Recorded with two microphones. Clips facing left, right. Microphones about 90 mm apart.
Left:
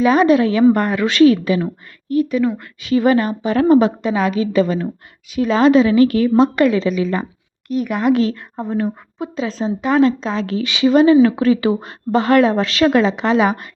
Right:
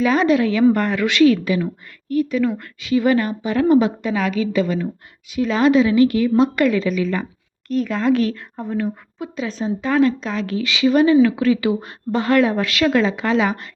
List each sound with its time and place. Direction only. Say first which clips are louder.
0.0 s speech: left 3 dB; 20° left (ahead or behind)
2.9 s a woman's voice: left 2 dB; 35° left (ahead or behind)
3.8 s speech: left 3 dB; 25° left (ahead or behind)
4.6 s speech: left 2 dB; 40° left (ahead or behind)
5.4 s a woman's voice: left 3 dB; 30° left (ahead or behind)
7.7 s speech: left 2 dB; 15° left (ahead or behind)